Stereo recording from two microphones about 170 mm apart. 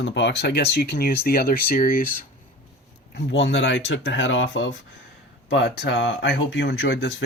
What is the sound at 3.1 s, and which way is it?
Speech, 90° left.